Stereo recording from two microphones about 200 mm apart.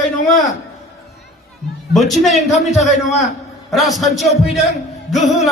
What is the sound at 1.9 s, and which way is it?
Music, centre (ahead or behind).